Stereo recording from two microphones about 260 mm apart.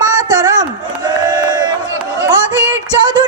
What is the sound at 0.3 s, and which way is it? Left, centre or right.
Run, centre.